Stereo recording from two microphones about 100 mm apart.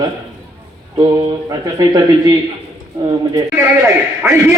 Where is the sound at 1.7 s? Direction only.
35° right (ahead or behind).